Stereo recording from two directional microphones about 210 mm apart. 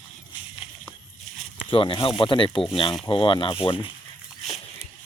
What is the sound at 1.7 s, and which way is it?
Speech, 25° left (ahead or behind).